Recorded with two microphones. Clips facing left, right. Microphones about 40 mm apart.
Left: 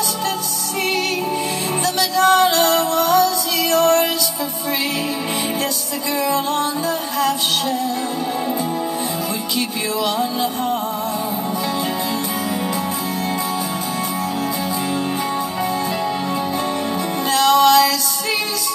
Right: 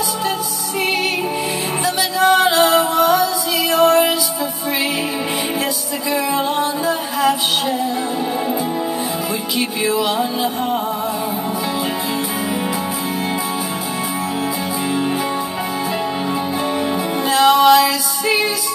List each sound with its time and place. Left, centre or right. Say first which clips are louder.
2.0 s music: even; centre
6.2 s music: left 1 dB; centre
9.6 s music: right 4 dB; centre
17.3 s music: right 2 dB; centre